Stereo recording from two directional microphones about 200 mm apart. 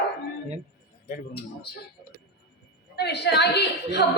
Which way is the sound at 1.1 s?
55° left (ahead or behind).